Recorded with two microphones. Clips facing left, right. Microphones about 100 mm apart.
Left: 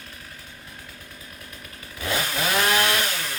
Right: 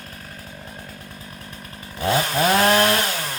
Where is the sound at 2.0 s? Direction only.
40° right (ahead or behind).